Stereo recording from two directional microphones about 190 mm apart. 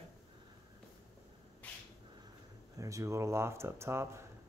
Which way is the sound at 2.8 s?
15° right (ahead or behind).